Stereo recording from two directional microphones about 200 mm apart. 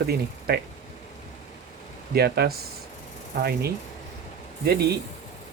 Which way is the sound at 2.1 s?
50° right (ahead or behind).